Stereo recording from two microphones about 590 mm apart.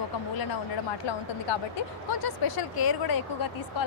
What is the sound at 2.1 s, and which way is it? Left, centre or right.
A woman's voice, left.